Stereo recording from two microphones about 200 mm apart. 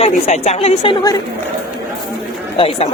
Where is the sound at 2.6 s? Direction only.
30° left (ahead or behind).